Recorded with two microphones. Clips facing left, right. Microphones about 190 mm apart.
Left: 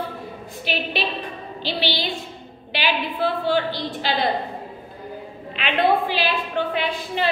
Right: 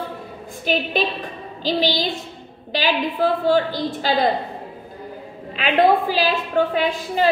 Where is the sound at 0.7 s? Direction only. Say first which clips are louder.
Right 5 dB; 45° right (ahead or behind).